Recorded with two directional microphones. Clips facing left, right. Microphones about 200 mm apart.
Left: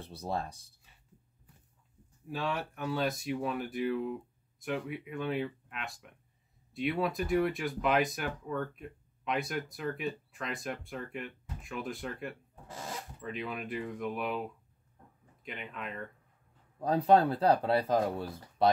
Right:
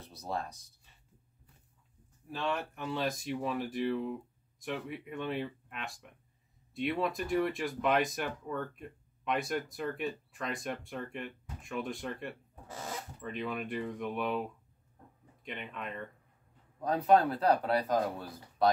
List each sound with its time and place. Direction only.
0.0 s speech: 30° left (ahead or behind)
2.3 s speech: 5° left (ahead or behind)
15.4 s speech: centre (ahead or behind)
16.8 s speech: 30° left (ahead or behind)